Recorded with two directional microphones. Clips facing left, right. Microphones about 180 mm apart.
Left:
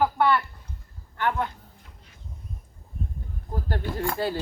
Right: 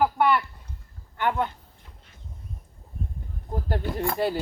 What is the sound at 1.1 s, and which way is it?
Speech, 20° right (ahead or behind).